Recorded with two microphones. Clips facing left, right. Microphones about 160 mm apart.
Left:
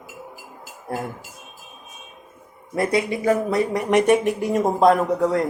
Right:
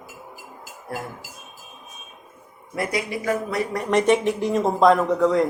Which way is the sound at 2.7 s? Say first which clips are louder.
Left 5 dB; 25° left (ahead or behind).